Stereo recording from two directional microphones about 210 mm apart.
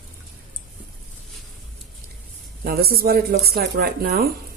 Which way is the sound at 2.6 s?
45° right (ahead or behind).